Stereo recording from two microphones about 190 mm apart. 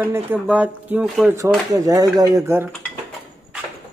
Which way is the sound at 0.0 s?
10° right (ahead or behind).